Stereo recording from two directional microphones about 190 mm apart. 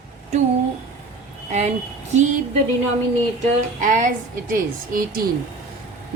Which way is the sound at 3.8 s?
45° right (ahead or behind).